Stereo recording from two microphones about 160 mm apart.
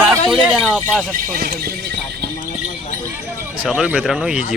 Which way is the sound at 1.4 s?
75° right (ahead or behind).